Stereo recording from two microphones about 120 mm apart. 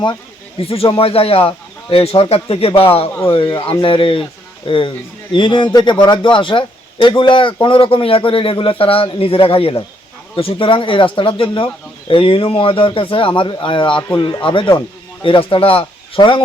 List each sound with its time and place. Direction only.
0.6 s a man's voice: 55° left (ahead or behind)